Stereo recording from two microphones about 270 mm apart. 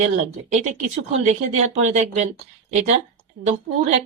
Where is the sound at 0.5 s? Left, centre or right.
Right.